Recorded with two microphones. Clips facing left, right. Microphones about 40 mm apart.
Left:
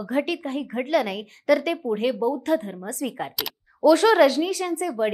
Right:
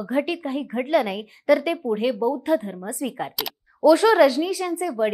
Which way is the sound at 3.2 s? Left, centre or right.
Centre.